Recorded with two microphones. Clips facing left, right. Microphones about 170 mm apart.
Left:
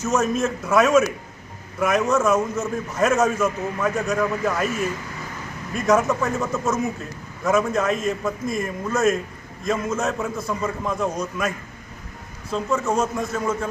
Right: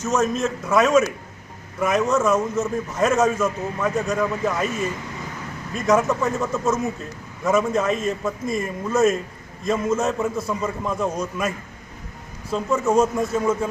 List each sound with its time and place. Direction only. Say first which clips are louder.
0.0 s a man's voice: even; 5° left (ahead or behind)
5.8 s a man's voice: even; centre (ahead or behind)